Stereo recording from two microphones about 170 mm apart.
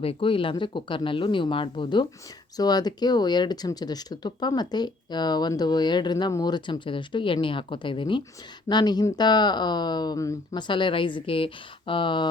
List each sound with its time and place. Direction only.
0.0 s speech: 35° left (ahead or behind)